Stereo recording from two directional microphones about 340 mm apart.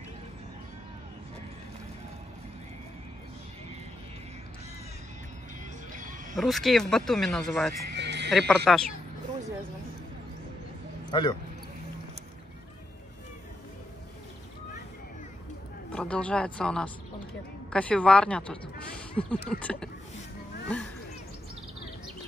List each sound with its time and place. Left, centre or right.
6.3 s speech: centre
7.8 s music: right
8.3 s speech: centre
11.1 s speech: centre
15.9 s speech: centre